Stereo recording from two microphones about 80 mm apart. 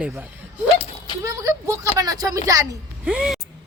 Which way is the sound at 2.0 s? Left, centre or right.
Right.